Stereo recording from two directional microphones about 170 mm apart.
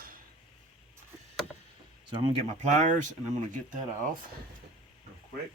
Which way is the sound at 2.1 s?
30° right (ahead or behind).